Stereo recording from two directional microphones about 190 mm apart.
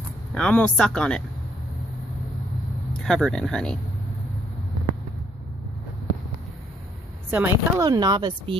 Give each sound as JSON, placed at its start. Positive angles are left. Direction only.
{"t": 0.3, "sound": "speech", "side_deg": 5}
{"t": 2.9, "sound": "speech", "side_deg": 0}
{"t": 7.2, "sound": "speech", "side_deg": -10}